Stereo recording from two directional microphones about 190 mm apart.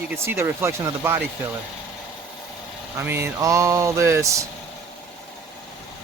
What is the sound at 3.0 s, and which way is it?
Speech, 10° right (ahead or behind).